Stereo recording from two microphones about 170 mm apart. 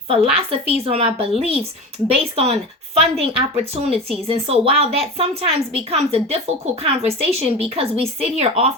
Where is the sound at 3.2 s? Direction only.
35° right (ahead or behind).